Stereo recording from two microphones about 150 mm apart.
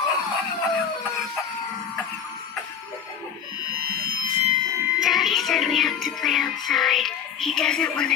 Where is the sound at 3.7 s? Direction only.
90° right.